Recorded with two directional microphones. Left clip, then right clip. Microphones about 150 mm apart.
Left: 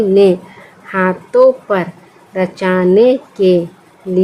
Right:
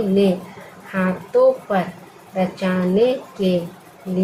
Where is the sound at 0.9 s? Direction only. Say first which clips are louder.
Left 7 dB; 90° left.